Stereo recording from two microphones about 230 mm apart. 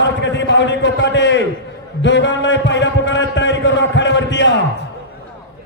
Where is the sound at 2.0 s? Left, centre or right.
Left.